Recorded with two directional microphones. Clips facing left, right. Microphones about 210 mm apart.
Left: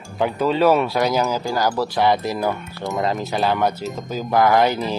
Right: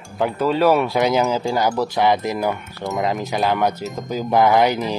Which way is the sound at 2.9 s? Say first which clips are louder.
Even; 15° right (ahead or behind).